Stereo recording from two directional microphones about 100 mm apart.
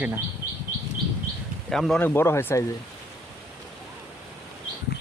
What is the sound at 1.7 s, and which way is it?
Speech, 5° left (ahead or behind).